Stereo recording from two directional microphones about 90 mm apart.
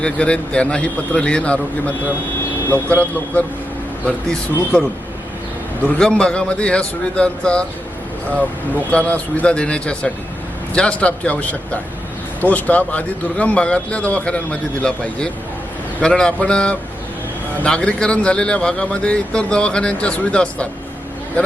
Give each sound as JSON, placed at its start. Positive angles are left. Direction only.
{"t": 0.0, "sound": "a man's voice", "side_deg": 10}
{"t": 6.0, "sound": "a man's voice", "side_deg": 10}
{"t": 8.9, "sound": "a man's voice", "side_deg": 15}